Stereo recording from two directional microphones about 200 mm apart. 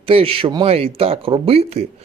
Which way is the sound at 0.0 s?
30° right (ahead or behind).